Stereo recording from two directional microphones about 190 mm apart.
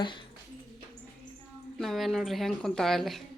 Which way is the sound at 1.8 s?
Centre (ahead or behind).